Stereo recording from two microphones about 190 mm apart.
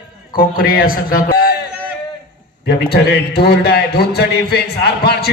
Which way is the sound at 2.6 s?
60° left (ahead or behind).